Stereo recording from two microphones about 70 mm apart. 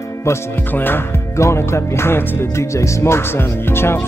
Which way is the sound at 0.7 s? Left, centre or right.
Left.